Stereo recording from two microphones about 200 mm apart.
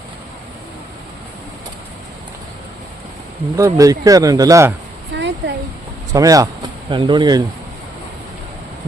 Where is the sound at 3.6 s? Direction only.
15° right (ahead or behind).